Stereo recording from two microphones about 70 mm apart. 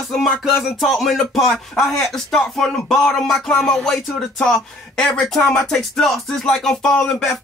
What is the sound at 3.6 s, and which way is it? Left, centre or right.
Speech, centre.